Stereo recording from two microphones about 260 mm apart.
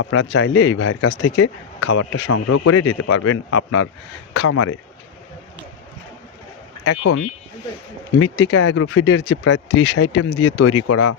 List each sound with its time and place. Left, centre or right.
0.0 s speech: left
1.8 s speech: left
2.1 s speech: left
8.2 s speech: left